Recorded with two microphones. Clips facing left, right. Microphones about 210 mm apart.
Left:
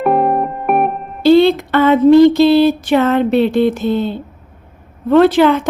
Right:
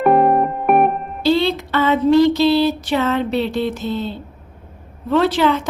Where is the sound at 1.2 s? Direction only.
55° left (ahead or behind).